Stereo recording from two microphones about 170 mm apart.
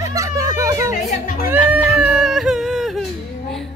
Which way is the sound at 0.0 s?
20° right (ahead or behind).